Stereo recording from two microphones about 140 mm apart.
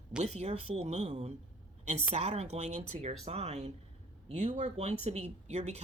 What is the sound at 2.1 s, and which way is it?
Speech, 50° right (ahead or behind).